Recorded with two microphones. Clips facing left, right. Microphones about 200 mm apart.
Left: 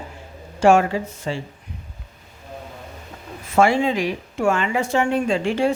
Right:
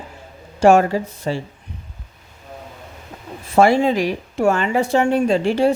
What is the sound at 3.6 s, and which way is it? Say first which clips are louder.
Speech: right 3 dB; 40° right (ahead or behind).